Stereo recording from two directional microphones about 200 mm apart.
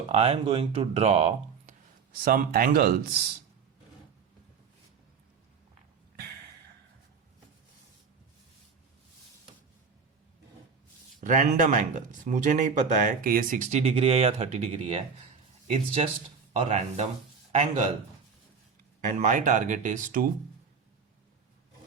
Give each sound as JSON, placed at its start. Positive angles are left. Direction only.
{"t": 0.1, "sound": "speech", "side_deg": -30}
{"t": 2.2, "sound": "speech", "side_deg": -45}
{"t": 11.2, "sound": "speech", "side_deg": -40}
{"t": 16.5, "sound": "speech", "side_deg": -35}
{"t": 19.0, "sound": "speech", "side_deg": -40}